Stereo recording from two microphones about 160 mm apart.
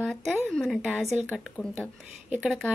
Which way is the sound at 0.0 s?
5° left (ahead or behind).